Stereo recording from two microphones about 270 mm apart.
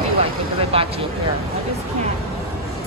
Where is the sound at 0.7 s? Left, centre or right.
Right.